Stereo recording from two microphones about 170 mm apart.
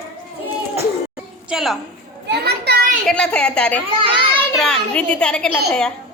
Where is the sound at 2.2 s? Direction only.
75° right (ahead or behind).